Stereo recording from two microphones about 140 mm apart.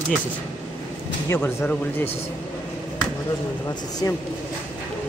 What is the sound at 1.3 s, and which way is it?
Speech, 15° left (ahead or behind).